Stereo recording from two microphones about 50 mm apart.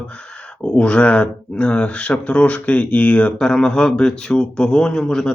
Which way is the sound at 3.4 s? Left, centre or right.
Centre.